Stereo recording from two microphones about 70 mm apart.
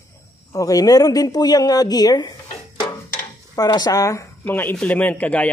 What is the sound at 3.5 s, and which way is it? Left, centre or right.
Speech, left.